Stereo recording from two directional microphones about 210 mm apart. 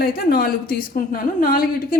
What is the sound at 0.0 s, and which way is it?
A woman's voice, 45° left (ahead or behind).